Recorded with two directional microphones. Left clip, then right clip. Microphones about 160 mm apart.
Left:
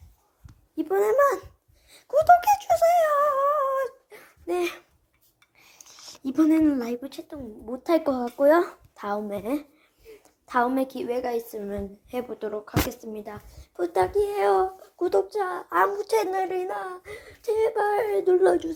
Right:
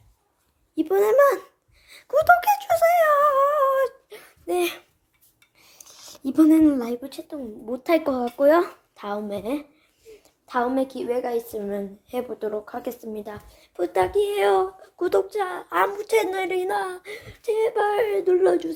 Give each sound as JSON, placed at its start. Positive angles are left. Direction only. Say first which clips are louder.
{"t": 0.8, "sound": "a child's voice", "louder": "right 3 dB", "side_deg": -15}
{"t": 1.9, "sound": "a sound", "louder": "even", "side_deg": -5}
{"t": 4.4, "sound": "a woman's voice", "louder": "right 3 dB", "side_deg": -10}
{"t": 9.0, "sound": "a woman's voice", "louder": "even", "side_deg": 10}
{"t": 17.2, "sound": "speech", "louder": "right 1 dB", "side_deg": 10}